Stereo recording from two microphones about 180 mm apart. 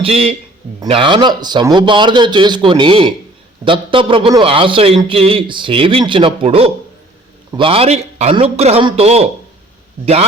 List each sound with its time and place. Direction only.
0.0 s a man's voice: 35° right (ahead or behind)